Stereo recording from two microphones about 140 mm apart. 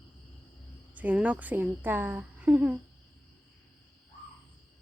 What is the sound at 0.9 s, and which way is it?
A woman's voice, 10° right (ahead or behind).